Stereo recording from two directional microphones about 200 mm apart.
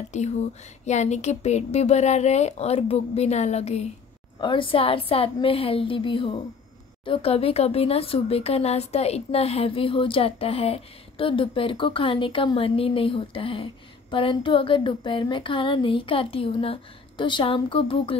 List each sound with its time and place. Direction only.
0.1 s a woman's voice: 35° left (ahead or behind)